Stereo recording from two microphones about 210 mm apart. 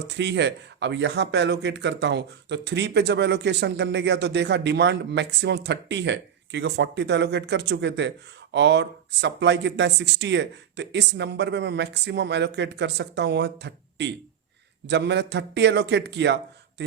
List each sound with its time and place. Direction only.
0.2 s speech: 55° right (ahead or behind)